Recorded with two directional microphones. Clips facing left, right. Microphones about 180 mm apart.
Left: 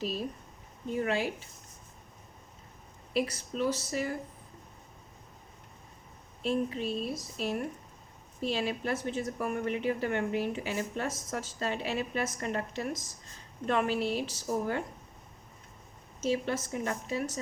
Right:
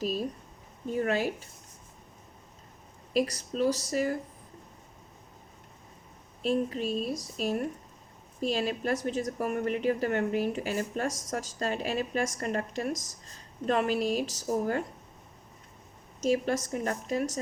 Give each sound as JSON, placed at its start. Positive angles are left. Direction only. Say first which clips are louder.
{"t": 0.9, "sound": "a woman's voice", "louder": "right 2 dB", "side_deg": -45}
{"t": 3.1, "sound": "speech", "louder": "right 3 dB", "side_deg": -40}
{"t": 6.4, "sound": "a woman's voice", "louder": "right 2 dB", "side_deg": -40}
{"t": 16.2, "sound": "a woman's voice", "louder": "right 3 dB", "side_deg": -45}